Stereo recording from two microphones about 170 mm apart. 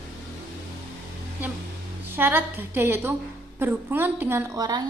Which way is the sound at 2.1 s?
10° right (ahead or behind).